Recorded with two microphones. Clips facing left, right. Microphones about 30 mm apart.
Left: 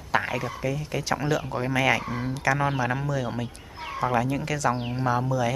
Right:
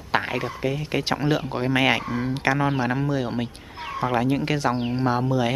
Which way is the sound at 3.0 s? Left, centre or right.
Right.